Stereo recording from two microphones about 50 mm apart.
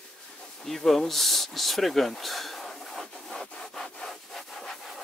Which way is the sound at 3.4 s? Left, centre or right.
Left.